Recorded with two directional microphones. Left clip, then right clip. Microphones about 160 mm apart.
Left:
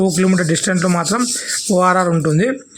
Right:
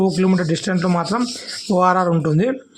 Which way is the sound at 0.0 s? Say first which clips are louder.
Left 2 dB; 20° left (ahead or behind).